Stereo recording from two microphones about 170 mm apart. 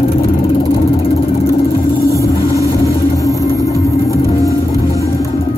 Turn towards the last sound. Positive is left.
turn(degrees=-20)  # may be behind; listen again after turning